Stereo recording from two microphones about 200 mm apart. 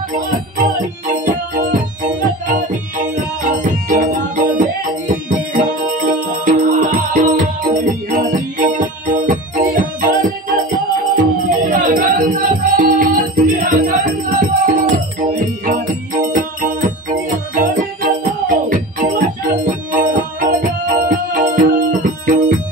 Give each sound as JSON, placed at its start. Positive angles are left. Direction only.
{"t": 0.6, "sound": "music", "side_deg": -40}
{"t": 11.4, "sound": "music", "side_deg": -40}